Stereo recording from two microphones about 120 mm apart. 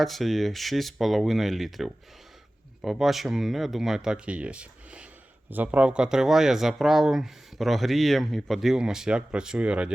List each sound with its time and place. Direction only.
0.0 s speech: centre (ahead or behind)